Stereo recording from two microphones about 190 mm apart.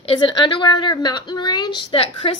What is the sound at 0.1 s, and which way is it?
A woman's voice, 25° left (ahead or behind).